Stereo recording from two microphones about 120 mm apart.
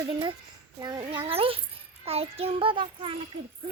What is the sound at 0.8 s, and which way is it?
Child singing, 35° right (ahead or behind).